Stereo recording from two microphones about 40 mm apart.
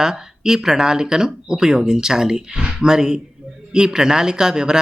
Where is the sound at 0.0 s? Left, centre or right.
Centre.